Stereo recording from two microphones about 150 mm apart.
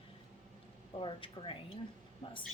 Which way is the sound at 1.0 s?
35° left (ahead or behind).